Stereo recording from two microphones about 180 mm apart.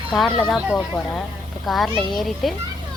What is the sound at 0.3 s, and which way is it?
A child's voice, centre (ahead or behind).